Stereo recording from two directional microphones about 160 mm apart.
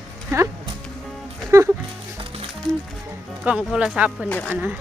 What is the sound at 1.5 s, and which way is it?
Music, 20° right (ahead or behind).